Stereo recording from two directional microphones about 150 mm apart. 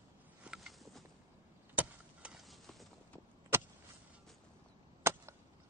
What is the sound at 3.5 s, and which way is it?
Vehicle, 15° right (ahead or behind).